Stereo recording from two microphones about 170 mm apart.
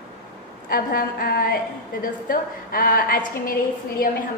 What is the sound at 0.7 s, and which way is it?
A woman's voice, 60° left (ahead or behind).